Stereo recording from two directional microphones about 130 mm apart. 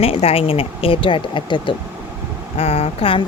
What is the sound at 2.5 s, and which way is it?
Speech, 50° left (ahead or behind).